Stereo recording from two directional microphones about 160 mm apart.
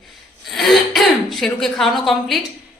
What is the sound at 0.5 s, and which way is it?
A woman's voice, centre (ahead or behind).